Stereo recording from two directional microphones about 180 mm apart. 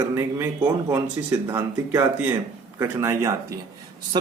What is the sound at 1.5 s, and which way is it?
Speech, 15° right (ahead or behind).